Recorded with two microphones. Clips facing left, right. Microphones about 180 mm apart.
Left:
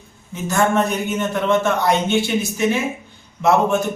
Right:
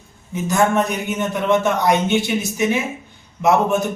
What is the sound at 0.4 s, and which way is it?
A man's voice, 15° right (ahead or behind).